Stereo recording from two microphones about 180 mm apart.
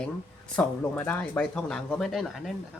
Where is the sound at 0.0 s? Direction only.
5° left (ahead or behind).